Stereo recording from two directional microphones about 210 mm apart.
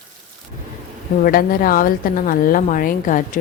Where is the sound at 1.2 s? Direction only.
45° left (ahead or behind).